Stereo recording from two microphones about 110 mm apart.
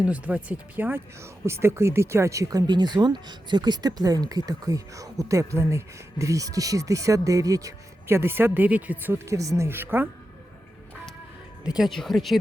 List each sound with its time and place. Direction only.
0.0 s speech: 10° right (ahead or behind)
11.6 s speech: 5° right (ahead or behind)